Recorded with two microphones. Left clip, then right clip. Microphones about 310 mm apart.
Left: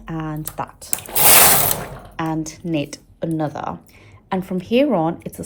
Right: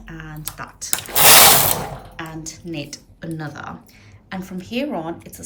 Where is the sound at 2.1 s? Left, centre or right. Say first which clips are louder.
Left 8 dB; centre.